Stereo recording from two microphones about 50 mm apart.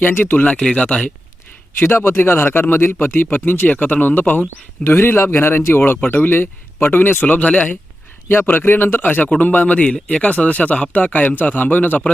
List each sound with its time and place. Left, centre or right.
0.1 s speech: left
0.6 s speech: left
1.8 s speech: left
8.3 s speech: left